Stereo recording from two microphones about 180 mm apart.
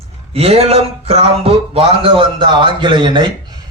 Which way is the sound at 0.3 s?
35° right (ahead or behind).